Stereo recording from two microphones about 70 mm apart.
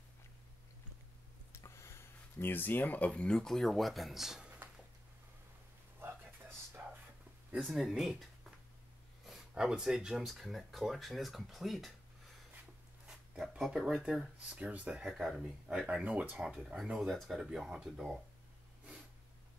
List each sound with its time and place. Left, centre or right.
1.6 s a sound: left
3.1 s speech: centre
6.8 s whispering: right
7.7 s speech: centre
9.5 s speech: centre
13.0 s a sound: centre
13.6 s speech: centre
14.5 s speech: centre
15.1 s speech: centre
15.9 s speech: centre